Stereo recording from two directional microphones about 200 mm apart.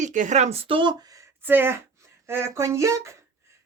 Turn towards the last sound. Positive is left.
turn(degrees=-15)  # may be behind; listen again after turning